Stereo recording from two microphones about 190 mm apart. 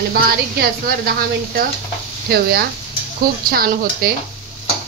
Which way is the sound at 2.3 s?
55° right (ahead or behind).